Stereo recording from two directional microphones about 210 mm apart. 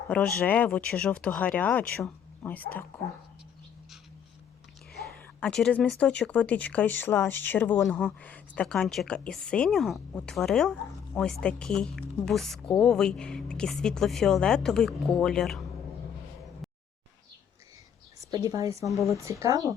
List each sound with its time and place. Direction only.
0.3 s speech: 5° left (ahead or behind)
5.4 s speech: 5° left (ahead or behind)
16.6 s a sound: centre (ahead or behind)
18.4 s speech: 15° right (ahead or behind)
18.9 s speech: centre (ahead or behind)
19.1 s speech: 15° right (ahead or behind)